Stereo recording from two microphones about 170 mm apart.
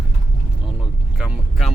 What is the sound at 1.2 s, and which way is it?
Speech, centre (ahead or behind).